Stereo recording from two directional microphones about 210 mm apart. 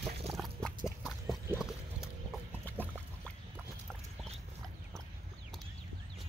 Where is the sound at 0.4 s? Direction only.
5° left (ahead or behind).